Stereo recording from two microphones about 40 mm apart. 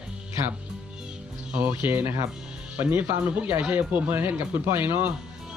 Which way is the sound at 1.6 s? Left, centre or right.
Right.